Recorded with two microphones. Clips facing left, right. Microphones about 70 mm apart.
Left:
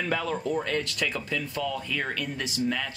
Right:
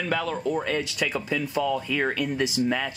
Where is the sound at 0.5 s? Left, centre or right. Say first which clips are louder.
Right 2 dB; centre.